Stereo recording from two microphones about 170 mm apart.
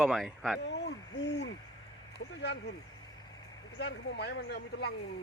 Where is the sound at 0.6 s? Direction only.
90° left.